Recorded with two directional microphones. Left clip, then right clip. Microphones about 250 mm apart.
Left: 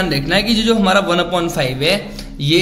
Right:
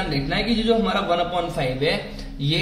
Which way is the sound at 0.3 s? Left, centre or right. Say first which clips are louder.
Left 5 dB; left.